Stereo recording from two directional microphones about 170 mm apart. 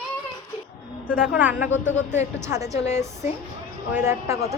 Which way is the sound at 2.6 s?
40° left (ahead or behind).